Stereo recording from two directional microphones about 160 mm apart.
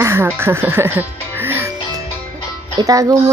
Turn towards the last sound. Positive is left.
turn(degrees=-20)  # may be behind; listen again after turning